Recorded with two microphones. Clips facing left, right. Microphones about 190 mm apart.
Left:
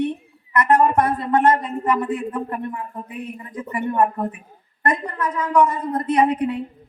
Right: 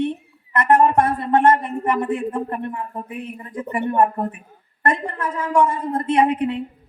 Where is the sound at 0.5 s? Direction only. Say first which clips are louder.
Right 1 dB; 25° right (ahead or behind).